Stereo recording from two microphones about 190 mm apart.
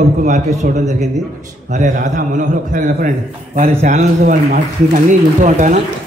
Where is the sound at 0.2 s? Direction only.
40° right (ahead or behind).